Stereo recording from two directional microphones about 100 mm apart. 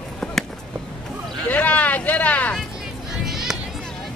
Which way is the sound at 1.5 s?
15° left (ahead or behind).